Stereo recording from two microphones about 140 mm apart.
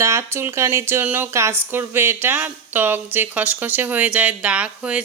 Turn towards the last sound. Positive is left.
turn(degrees=-10)  # may be behind; listen again after turning